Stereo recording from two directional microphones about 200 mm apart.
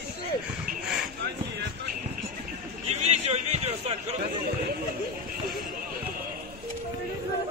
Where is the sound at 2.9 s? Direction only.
35° right (ahead or behind).